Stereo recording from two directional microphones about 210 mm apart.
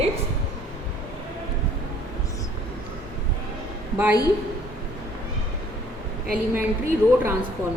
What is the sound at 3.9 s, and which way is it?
Speech, 10° right (ahead or behind).